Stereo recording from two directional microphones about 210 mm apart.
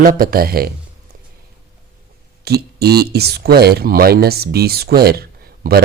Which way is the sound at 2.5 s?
50° right (ahead or behind).